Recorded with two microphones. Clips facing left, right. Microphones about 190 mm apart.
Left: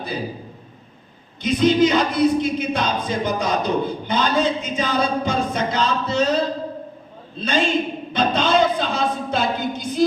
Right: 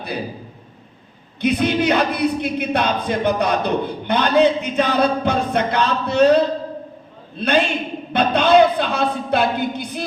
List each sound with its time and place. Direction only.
1.4 s choir: 60° right (ahead or behind)